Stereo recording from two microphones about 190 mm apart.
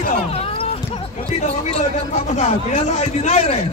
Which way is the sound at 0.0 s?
35° left (ahead or behind).